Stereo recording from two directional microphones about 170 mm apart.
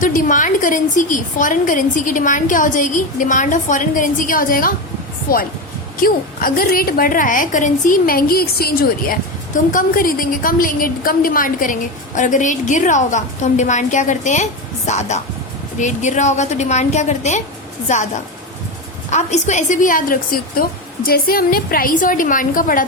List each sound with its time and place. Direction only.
0.0 s a woman's voice: 50° left (ahead or behind)
6.0 s a woman's voice: 55° left (ahead or behind)